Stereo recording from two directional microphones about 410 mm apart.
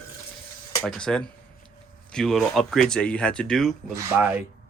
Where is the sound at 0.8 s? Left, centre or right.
Centre.